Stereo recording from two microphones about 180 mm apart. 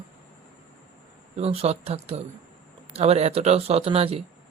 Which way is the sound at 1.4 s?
35° right (ahead or behind).